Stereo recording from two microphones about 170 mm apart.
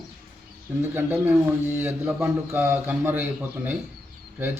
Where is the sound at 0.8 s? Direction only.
10° right (ahead or behind).